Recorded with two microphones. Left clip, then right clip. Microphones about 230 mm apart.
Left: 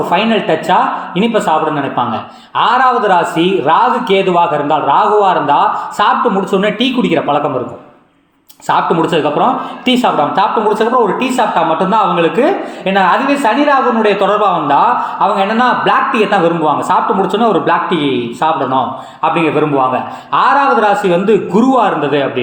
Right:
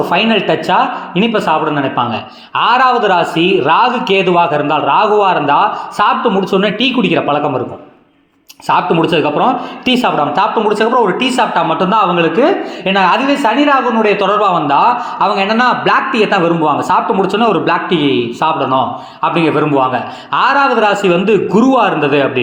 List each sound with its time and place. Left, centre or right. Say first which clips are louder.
0.1 s speech: left 1 dB; right
8.6 s speech: even; right